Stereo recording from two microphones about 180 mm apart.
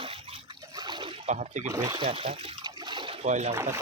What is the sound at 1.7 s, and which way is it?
Speech, 20° right (ahead or behind).